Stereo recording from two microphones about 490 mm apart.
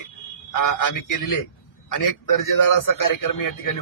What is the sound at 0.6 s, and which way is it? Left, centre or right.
A man's voice, left.